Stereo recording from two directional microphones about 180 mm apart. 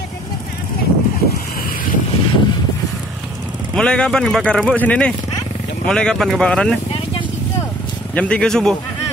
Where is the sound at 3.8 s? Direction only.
5° left (ahead or behind).